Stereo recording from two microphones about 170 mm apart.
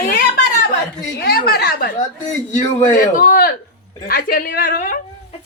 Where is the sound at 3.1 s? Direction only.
55° left (ahead or behind).